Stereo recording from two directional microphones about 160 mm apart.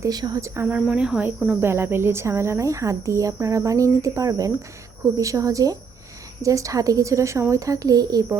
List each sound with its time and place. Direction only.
0.0 s speech: 25° right (ahead or behind)